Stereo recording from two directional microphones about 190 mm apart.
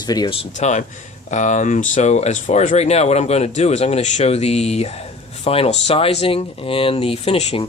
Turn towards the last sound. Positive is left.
turn(degrees=30)  # may be behind; listen again after turning